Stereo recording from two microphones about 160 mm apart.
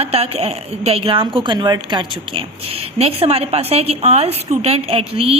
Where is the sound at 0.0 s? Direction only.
40° right (ahead or behind).